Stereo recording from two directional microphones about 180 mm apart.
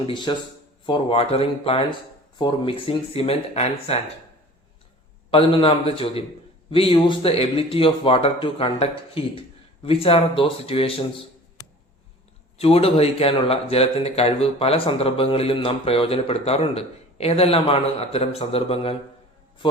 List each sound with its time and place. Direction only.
0.0 s speech: 25° left (ahead or behind)
5.3 s speech: 30° left (ahead or behind)
12.5 s speech: 35° left (ahead or behind)